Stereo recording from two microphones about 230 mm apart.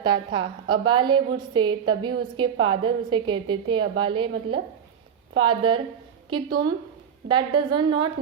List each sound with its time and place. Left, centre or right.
0.0 s a woman's voice: right